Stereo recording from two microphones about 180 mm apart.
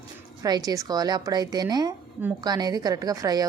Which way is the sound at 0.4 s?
20° right (ahead or behind).